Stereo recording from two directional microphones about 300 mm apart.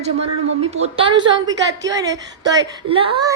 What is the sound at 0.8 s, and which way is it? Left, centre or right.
A woman's voice, centre.